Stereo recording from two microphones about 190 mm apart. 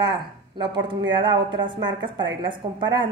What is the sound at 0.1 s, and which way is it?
A woman's voice, 25° right (ahead or behind).